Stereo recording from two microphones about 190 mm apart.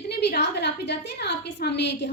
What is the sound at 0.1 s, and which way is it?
A woman's voice, 60° left (ahead or behind).